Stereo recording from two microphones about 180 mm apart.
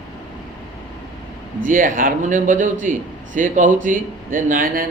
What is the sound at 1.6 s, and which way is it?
Speech, 50° right (ahead or behind).